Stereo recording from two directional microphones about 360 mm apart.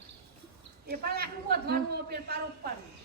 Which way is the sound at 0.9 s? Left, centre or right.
Right.